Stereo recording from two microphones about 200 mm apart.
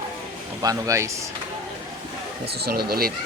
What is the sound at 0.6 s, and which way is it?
Speech, 15° right (ahead or behind).